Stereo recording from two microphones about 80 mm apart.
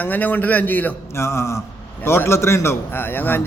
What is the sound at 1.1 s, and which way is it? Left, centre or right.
Mantra, left.